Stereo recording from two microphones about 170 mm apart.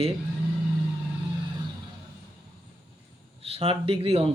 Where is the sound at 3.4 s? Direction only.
35° right (ahead or behind).